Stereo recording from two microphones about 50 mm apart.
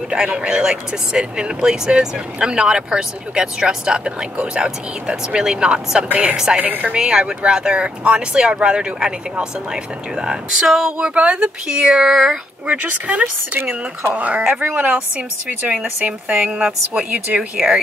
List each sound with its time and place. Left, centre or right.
0.3 s speech: right
6.6 s speech: right
7.0 s a woman's voice: centre
12.6 s a woman's voice: right
15.1 s a woman's voice: right